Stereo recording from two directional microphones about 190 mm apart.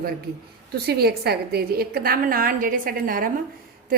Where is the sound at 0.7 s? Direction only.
55° right (ahead or behind).